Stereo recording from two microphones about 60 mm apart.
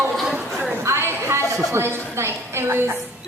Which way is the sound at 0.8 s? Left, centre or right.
Right.